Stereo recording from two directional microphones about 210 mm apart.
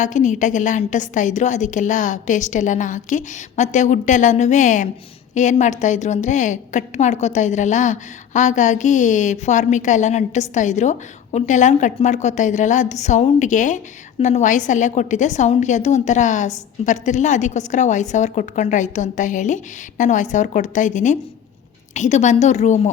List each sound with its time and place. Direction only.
0.0 s a woman's voice: 35° left (ahead or behind)